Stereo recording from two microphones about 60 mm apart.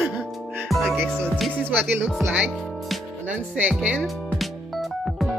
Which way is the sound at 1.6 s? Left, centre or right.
Right.